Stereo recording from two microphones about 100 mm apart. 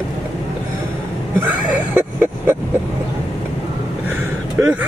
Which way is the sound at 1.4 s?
15° right (ahead or behind).